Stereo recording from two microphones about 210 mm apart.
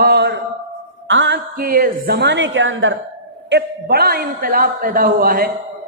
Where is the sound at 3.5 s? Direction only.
50° right (ahead or behind).